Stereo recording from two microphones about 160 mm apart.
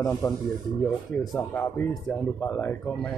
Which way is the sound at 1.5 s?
15° left (ahead or behind).